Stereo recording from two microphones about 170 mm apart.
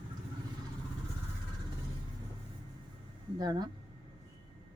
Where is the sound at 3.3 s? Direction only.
25° right (ahead or behind).